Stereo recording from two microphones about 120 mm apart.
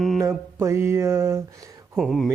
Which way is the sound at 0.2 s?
25° right (ahead or behind).